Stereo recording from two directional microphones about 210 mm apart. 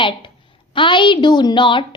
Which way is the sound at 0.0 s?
25° left (ahead or behind).